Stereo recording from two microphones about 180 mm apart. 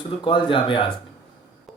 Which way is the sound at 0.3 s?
30° left (ahead or behind).